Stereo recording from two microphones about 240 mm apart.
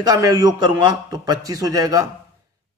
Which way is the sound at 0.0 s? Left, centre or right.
Centre.